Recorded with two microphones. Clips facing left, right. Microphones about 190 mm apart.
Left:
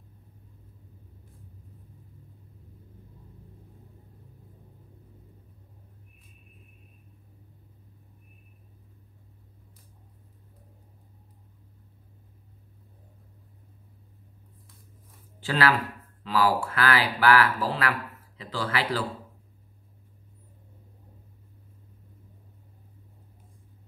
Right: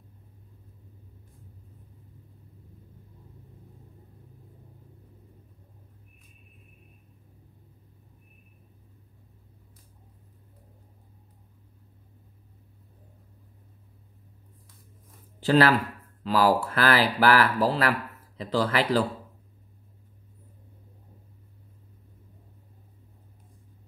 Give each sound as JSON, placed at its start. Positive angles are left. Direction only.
{"t": 15.4, "sound": "speech", "side_deg": -40}